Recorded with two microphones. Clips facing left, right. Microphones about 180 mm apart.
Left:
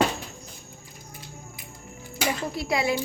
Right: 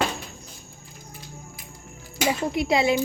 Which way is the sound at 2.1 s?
20° right (ahead or behind).